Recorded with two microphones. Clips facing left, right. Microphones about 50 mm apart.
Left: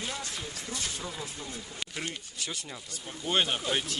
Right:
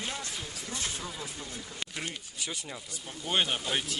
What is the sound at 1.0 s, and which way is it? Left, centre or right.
Speech, centre.